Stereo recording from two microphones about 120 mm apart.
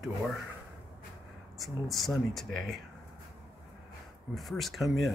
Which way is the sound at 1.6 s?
Centre (ahead or behind).